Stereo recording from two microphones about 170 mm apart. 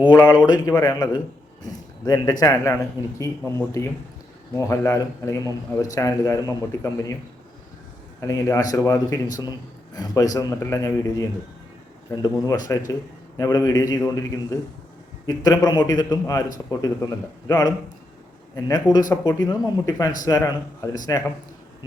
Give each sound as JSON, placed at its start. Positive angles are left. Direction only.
{"t": 0.3, "sound": "a man's voice", "side_deg": 25}
{"t": 8.2, "sound": "a man's voice", "side_deg": 15}
{"t": 15.4, "sound": "a man's voice", "side_deg": 25}